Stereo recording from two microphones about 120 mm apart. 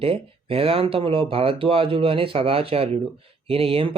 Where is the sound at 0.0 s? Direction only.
50° right (ahead or behind).